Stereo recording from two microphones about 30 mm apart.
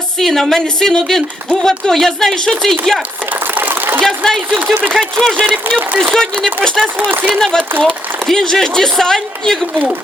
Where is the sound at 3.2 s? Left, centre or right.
Right.